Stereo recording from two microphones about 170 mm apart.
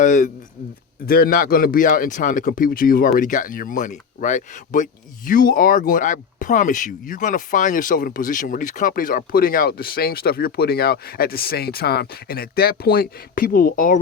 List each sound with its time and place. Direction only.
0.0 s a man's voice: 50° left (ahead or behind)
1.0 s a man's voice: 60° left (ahead or behind)